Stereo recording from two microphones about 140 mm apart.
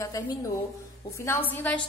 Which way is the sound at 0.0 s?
25° left (ahead or behind).